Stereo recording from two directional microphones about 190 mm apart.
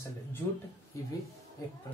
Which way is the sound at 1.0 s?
15° left (ahead or behind).